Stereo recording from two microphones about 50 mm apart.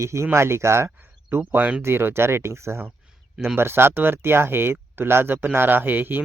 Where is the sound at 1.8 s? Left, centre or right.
Right.